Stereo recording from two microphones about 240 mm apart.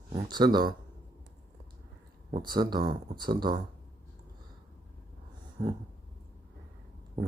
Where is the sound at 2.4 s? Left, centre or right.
Centre.